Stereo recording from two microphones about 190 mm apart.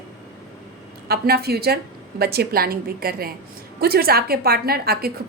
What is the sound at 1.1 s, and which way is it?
A woman's voice, 55° right (ahead or behind).